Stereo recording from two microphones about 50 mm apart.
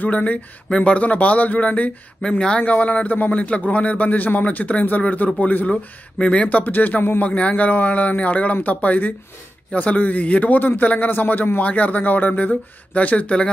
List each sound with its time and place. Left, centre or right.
0.0 s a man's voice: left
0.7 s a man's voice: centre
2.2 s a man's voice: centre; by 5.7 s left
5.7 s a man's voice: centre
6.6 s a man's voice: left